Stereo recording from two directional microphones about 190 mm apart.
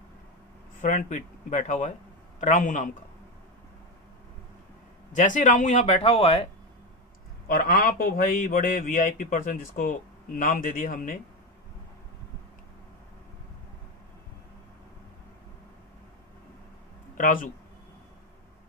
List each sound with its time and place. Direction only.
0.7 s a man's voice: 40° left (ahead or behind)
5.1 s speech: 40° left (ahead or behind)
7.4 s a man's voice: 50° left (ahead or behind)
17.2 s speech: 45° left (ahead or behind)